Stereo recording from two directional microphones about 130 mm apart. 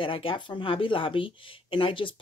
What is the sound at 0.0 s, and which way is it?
Speech, 45° left (ahead or behind).